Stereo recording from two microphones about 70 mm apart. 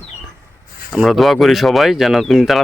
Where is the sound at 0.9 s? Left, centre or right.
Centre.